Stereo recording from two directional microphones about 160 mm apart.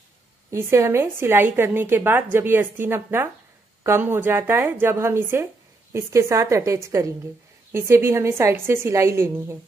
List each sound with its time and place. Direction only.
0.5 s a woman's voice: 15° right (ahead or behind)